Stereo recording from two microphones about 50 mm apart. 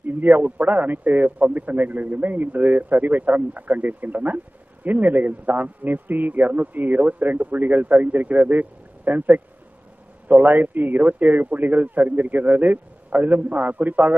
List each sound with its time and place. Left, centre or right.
0.0 s a man's voice: right
10.5 s a man's voice: right